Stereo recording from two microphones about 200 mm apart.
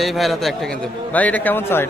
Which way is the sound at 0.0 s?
Centre (ahead or behind).